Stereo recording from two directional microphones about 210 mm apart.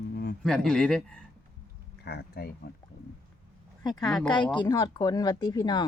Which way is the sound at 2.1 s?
50° left (ahead or behind).